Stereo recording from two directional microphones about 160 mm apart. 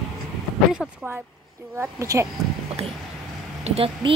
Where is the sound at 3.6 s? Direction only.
35° right (ahead or behind).